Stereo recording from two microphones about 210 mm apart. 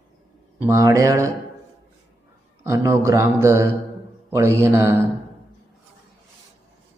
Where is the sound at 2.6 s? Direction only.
15° right (ahead or behind).